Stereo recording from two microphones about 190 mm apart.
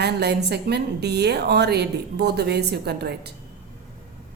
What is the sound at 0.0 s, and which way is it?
A woman's voice, 60° right (ahead or behind).